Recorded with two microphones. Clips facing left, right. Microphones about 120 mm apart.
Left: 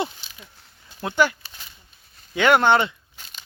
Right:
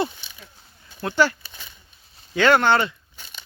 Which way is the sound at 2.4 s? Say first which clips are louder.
Even; 20° left (ahead or behind).